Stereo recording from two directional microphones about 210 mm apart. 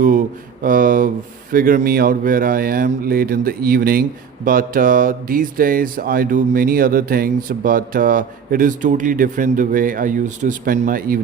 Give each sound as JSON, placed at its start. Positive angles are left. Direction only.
{"t": 0.0, "sound": "speech", "side_deg": -40}